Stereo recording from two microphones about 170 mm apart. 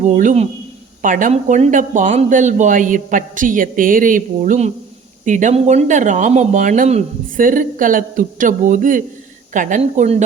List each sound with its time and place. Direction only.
0.0 s speech: 45° right (ahead or behind)